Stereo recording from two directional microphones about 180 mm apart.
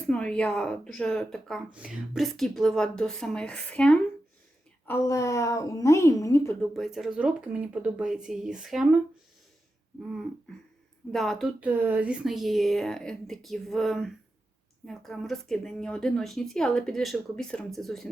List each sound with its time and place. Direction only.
0.1 s speech: 5° left (ahead or behind)
4.9 s a woman's voice: 15° left (ahead or behind)
6.6 s speech: centre (ahead or behind)
11.1 s speech: centre (ahead or behind)